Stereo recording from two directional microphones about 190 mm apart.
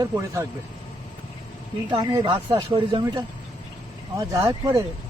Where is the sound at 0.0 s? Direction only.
15° right (ahead or behind).